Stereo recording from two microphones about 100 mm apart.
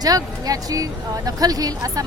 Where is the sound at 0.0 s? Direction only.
40° right (ahead or behind).